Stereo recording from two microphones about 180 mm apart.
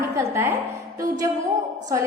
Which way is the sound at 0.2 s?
15° right (ahead or behind).